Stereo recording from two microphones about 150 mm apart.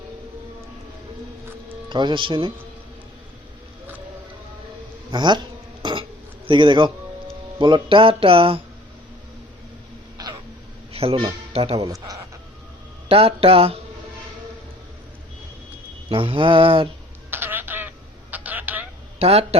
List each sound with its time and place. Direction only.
1.9 s speech: 30° right (ahead or behind)
5.1 s speech: 30° right (ahead or behind)
5.8 s a sound: 35° right (ahead or behind)
6.5 s speech: 30° right (ahead or behind)
10.9 s speech: 40° right (ahead or behind)
13.1 s speech: 40° right (ahead or behind)
16.0 s speech: 35° right (ahead or behind)
17.3 s telephone: 15° right (ahead or behind)
19.2 s speech: 45° right (ahead or behind)